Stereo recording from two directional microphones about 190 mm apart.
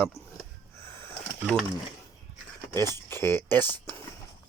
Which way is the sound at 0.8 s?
10° left (ahead or behind).